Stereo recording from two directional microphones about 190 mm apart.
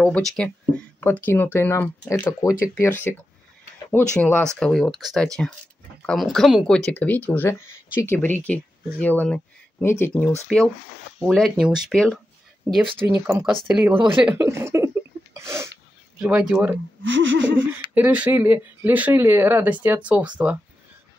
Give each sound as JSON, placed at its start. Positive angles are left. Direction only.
{"t": 0.0, "sound": "speech", "side_deg": 0}
{"t": 12.8, "sound": "speech", "side_deg": -25}
{"t": 13.7, "sound": "speech", "side_deg": -10}
{"t": 15.3, "sound": "sneeze", "side_deg": -15}
{"t": 16.2, "sound": "speech", "side_deg": -5}
{"t": 16.7, "sound": "a sound", "side_deg": -85}
{"t": 17.9, "sound": "speech", "side_deg": -10}